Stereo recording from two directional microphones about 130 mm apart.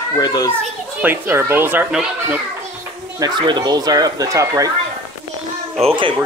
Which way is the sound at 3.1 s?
35° right (ahead or behind).